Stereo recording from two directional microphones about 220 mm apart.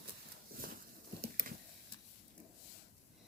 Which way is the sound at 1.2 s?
40° right (ahead or behind).